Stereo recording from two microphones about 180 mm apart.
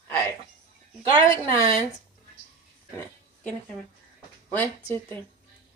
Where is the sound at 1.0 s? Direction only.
25° right (ahead or behind).